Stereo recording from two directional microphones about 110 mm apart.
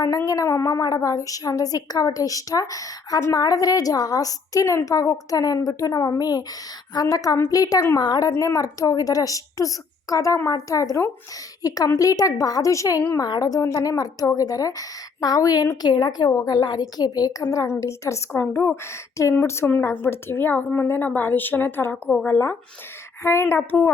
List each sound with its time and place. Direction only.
0.3 s a woman's voice: 30° left (ahead or behind)
7.9 s a woman's voice: 40° left (ahead or behind)
8.3 s a woman's voice: 30° left (ahead or behind)